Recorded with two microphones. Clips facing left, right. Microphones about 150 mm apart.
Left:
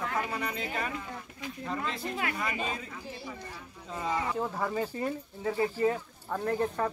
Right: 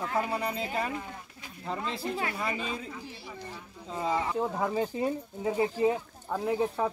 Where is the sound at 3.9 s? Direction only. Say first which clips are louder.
Right 2 dB; 25° right (ahead or behind); by 6.9 s 10° right (ahead or behind).